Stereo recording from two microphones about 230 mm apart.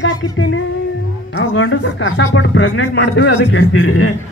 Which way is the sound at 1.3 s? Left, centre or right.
Left.